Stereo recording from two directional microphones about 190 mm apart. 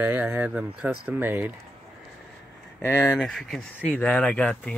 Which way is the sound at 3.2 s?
5° left (ahead or behind).